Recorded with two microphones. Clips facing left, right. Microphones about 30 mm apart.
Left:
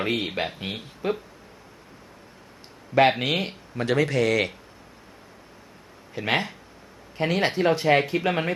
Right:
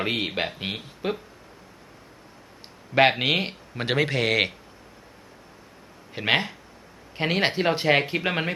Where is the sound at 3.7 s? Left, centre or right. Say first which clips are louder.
Left 2 dB; right.